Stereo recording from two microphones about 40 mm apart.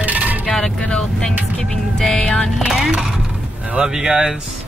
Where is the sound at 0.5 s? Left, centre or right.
Centre.